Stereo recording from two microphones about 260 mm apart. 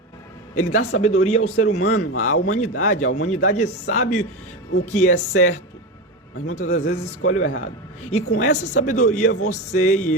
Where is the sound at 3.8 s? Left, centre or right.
Left.